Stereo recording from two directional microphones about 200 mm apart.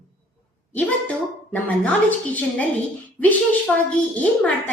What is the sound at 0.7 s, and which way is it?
A woman's voice, 5° left (ahead or behind).